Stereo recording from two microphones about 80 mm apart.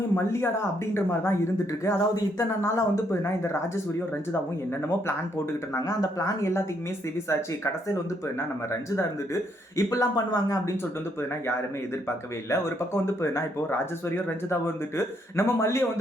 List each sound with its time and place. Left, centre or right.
0.3 s speech: left
5.7 s speech: left
9.0 s speech: left
12.0 s speech: left